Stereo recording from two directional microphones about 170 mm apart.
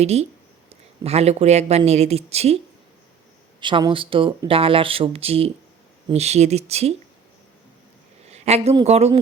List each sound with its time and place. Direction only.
0.0 s speech: 40° right (ahead or behind)
3.6 s speech: 30° right (ahead or behind)
8.3 s a sound: 40° right (ahead or behind)
8.7 s speech: 35° right (ahead or behind)